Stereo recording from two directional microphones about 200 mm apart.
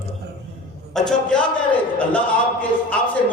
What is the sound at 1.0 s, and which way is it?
Speech, 5° left (ahead or behind).